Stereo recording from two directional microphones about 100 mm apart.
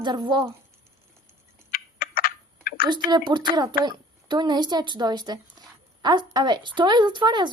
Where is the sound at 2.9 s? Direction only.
45° right (ahead or behind).